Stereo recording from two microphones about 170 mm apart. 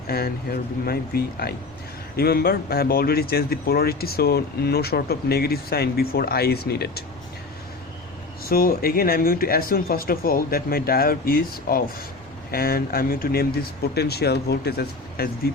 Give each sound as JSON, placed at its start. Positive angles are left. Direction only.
{"t": 0.1, "sound": "speech", "side_deg": 65}
{"t": 8.4, "sound": "speech", "side_deg": 60}